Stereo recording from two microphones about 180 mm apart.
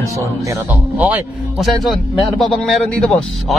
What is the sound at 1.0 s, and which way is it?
Speech, 5° right (ahead or behind).